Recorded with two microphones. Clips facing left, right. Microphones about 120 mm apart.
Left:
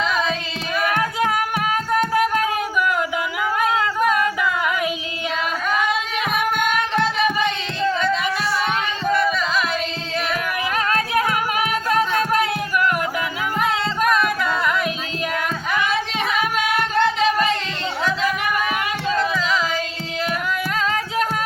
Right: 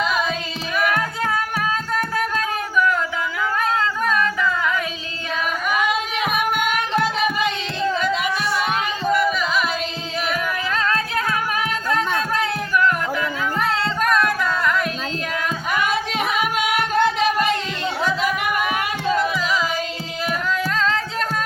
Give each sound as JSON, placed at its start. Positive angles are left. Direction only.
{"t": 0.0, "sound": "singing", "side_deg": -5}
{"t": 0.9, "sound": "a sound", "side_deg": 20}
{"t": 1.9, "sound": "music", "side_deg": 20}
{"t": 3.6, "sound": "singing", "side_deg": 15}
{"t": 6.3, "sound": "music", "side_deg": -5}
{"t": 10.8, "sound": "music", "side_deg": 15}
{"t": 13.6, "sound": "music", "side_deg": 5}
{"t": 16.4, "sound": "music", "side_deg": -15}
{"t": 19.1, "sound": "music", "side_deg": -10}
{"t": 20.7, "sound": "music", "side_deg": 10}